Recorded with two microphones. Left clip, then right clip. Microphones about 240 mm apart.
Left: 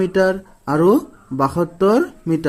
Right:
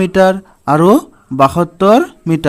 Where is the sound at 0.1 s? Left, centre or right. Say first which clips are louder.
Right 6 dB; right.